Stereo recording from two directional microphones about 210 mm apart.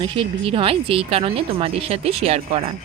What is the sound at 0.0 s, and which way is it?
Speech, 25° right (ahead or behind).